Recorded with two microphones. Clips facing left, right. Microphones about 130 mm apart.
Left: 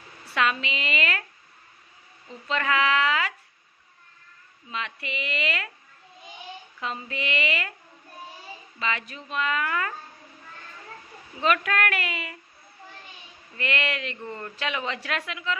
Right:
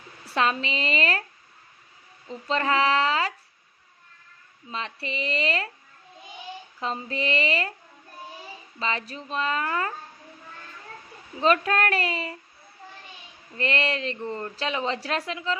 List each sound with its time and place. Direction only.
0.3 s a woman's voice: 35° right (ahead or behind)
2.2 s a woman's voice: 35° right (ahead or behind)
4.6 s a woman's voice: 35° right (ahead or behind)
6.8 s a woman's voice: 35° right (ahead or behind)
8.7 s a woman's voice: 30° right (ahead or behind)
11.3 s a woman's voice: 30° right (ahead or behind)
13.6 s a woman's voice: 35° right (ahead or behind)